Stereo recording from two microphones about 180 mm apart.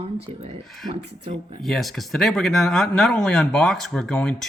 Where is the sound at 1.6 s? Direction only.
Centre (ahead or behind).